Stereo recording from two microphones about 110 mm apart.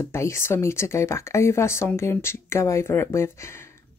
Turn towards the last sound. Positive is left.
turn(degrees=25)  # may be behind; listen again after turning